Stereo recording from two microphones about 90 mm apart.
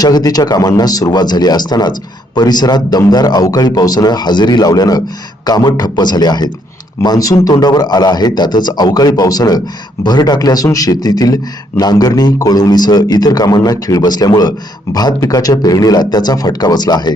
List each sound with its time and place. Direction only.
0.0 s a man's voice: 45° left (ahead or behind)